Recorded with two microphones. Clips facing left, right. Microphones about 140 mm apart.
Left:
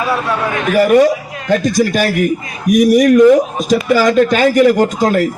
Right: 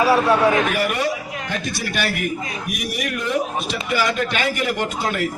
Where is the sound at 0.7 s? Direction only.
40° left (ahead or behind).